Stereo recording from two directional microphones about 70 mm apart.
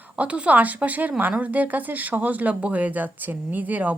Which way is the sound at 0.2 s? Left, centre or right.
Centre.